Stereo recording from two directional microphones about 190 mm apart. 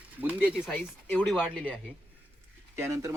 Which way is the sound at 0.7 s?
5° left (ahead or behind).